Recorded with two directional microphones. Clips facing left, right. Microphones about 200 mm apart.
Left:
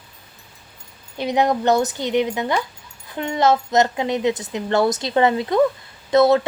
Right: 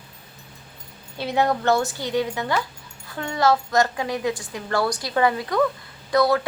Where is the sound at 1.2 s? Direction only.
20° left (ahead or behind).